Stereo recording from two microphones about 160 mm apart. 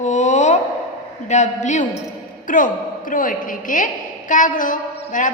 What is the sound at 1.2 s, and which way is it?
A woman's voice, 45° left (ahead or behind).